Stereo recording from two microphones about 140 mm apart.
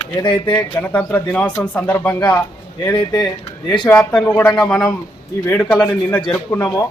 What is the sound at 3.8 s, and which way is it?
Speech, 5° left (ahead or behind).